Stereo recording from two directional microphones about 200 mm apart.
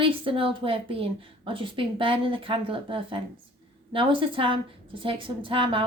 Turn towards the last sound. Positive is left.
turn(degrees=-25)  # may be behind; listen again after turning